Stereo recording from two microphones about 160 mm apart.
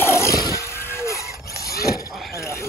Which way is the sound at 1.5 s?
75° left (ahead or behind).